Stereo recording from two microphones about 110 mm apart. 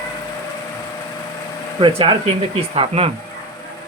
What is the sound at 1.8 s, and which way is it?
Speech, 55° right (ahead or behind).